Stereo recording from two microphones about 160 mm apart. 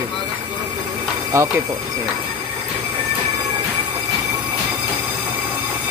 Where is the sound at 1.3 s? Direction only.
20° right (ahead or behind).